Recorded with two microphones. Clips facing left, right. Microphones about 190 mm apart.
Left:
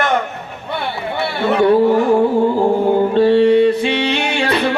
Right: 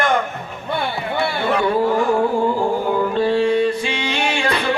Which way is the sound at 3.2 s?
65° left (ahead or behind).